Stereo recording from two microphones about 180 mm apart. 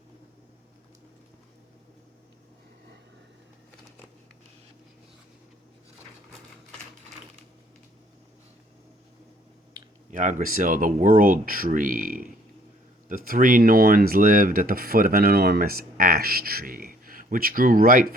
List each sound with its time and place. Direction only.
10.1 s speech: 45° right (ahead or behind)